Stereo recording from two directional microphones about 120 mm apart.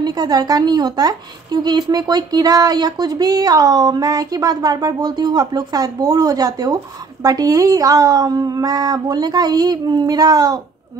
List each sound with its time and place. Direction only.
0.0 s a woman's voice: 35° right (ahead or behind)